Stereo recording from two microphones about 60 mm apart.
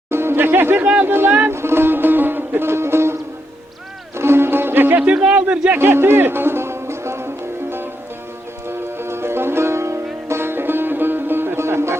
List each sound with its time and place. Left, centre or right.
0.1 s chatter: right
1.0 s speech: right
1.5 s music: right
4.2 s music: right
5.0 s speech: right
5.7 s music: right
8.6 s music: right